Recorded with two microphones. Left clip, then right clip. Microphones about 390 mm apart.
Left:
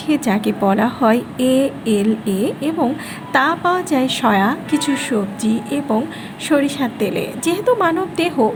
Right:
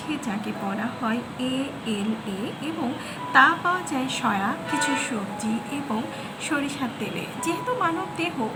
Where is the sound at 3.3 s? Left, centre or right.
Centre.